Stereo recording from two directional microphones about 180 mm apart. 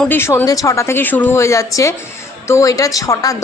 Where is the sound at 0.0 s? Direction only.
10° left (ahead or behind).